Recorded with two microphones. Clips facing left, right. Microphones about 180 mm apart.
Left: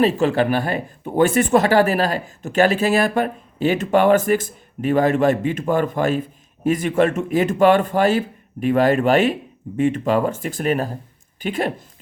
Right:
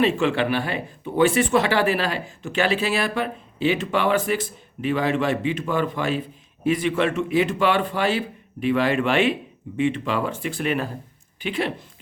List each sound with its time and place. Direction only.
0.0 s speech: 40° left (ahead or behind)